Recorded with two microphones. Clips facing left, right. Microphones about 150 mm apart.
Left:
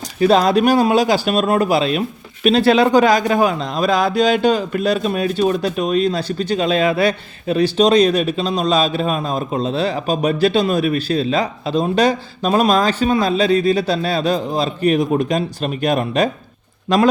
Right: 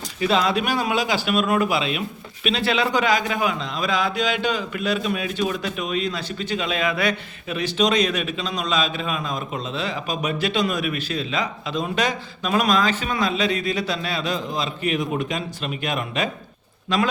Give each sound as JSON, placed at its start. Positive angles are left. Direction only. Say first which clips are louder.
{"t": 0.2, "sound": "speech", "louder": "left 8 dB", "side_deg": 40}